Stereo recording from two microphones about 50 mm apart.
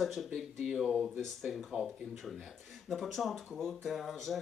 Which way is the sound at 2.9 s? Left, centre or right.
Centre.